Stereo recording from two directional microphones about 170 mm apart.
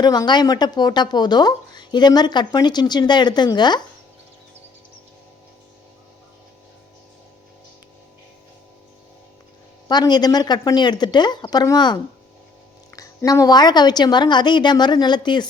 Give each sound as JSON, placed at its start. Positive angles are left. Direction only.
{"t": 0.0, "sound": "speech", "side_deg": 25}
{"t": 9.9, "sound": "speech", "side_deg": 25}
{"t": 13.0, "sound": "speech", "side_deg": 20}